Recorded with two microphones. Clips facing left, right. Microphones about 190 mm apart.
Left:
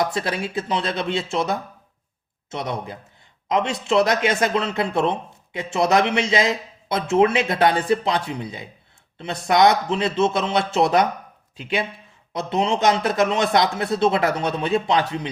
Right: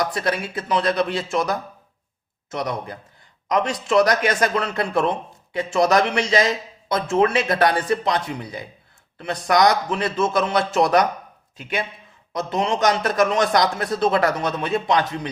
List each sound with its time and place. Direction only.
0.0 s speech: 25° left (ahead or behind)
12.3 s speech: 25° left (ahead or behind)